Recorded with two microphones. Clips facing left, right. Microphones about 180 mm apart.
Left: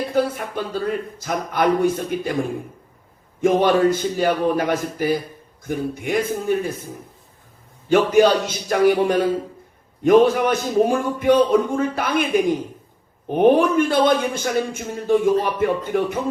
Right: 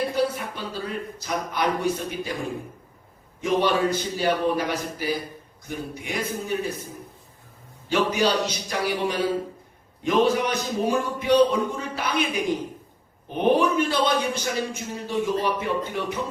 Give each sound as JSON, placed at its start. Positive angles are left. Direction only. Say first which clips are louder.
{"t": 0.2, "sound": "a man's voice", "louder": "left 4 dB", "side_deg": 50}
{"t": 3.4, "sound": "a man's voice", "louder": "left 6 dB", "side_deg": 50}
{"t": 7.9, "sound": "a man's voice", "louder": "left 8 dB", "side_deg": 50}